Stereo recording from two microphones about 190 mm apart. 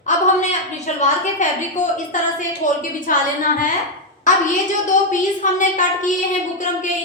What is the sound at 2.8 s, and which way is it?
Speech, 45° left (ahead or behind).